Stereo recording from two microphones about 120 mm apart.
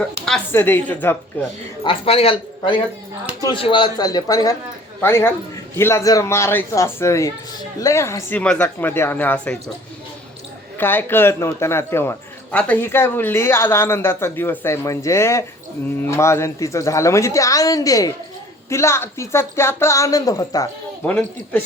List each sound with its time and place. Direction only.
0.5 s speech: 20° left (ahead or behind)
1.8 s a man's voice: 50° left (ahead or behind); by 4.5 s 30° left (ahead or behind)
4.9 s a man's voice: 20° left (ahead or behind)
8.4 s speech: 10° left (ahead or behind)
10.8 s a man's voice: 15° left (ahead or behind)
21.0 s speech: 15° left (ahead or behind)